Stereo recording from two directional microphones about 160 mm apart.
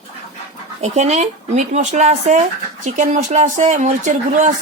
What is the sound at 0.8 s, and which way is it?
A woman's voice, 45° right (ahead or behind).